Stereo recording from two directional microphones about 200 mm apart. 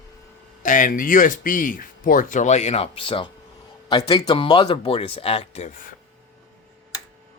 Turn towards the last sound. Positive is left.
turn(degrees=30)  # may be behind; listen again after turning